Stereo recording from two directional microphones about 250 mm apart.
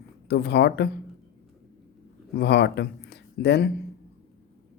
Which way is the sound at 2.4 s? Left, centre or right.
Left.